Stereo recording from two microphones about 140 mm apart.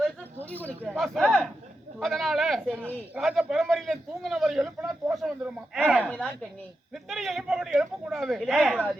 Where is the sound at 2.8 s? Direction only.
10° right (ahead or behind).